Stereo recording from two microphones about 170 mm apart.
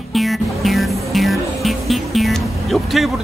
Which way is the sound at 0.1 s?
Centre (ahead or behind).